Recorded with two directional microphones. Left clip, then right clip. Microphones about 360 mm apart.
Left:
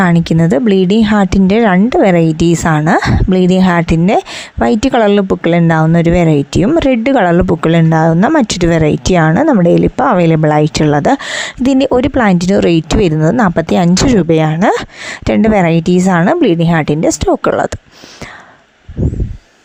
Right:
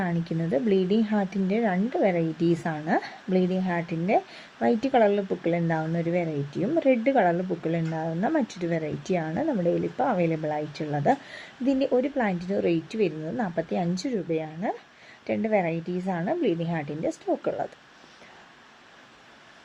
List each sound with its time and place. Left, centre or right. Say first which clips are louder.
0.0 s speech: left 18 dB; left